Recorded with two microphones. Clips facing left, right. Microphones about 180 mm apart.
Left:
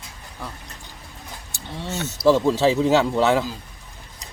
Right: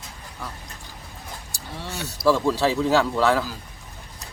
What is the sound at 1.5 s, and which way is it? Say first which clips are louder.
Speech: left 5 dB; 20° left (ahead or behind).